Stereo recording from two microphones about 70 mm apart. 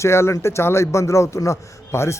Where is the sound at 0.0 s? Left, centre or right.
Left.